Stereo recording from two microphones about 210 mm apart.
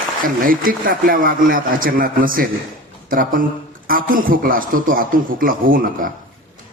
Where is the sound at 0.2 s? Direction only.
40° right (ahead or behind).